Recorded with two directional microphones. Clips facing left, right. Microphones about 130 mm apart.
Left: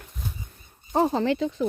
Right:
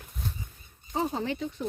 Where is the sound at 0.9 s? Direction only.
80° left.